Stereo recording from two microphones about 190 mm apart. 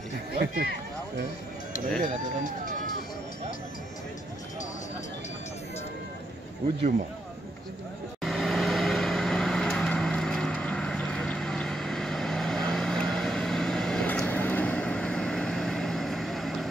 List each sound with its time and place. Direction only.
0.3 s speech: 55° right (ahead or behind)
2.0 s speech: 45° right (ahead or behind)
8.2 s vehicle: centre (ahead or behind)